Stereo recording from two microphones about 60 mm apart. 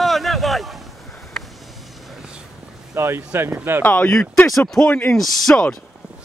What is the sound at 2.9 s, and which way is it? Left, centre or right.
Speech, right.